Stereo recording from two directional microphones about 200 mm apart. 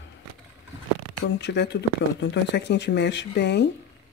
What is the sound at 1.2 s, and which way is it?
Speech, 60° left (ahead or behind).